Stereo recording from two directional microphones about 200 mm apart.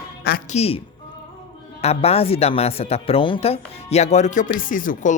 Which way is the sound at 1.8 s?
30° left (ahead or behind).